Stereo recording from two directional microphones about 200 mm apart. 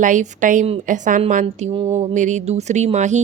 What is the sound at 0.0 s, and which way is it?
Speech, 40° right (ahead or behind).